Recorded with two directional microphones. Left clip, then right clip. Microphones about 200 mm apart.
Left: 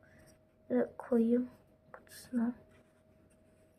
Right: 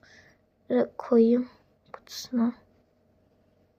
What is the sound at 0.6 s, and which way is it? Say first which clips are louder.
Speech: right 8 dB; 20° right (ahead or behind).